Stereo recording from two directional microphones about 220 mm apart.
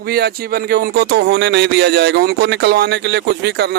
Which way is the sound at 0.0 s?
45° right (ahead or behind).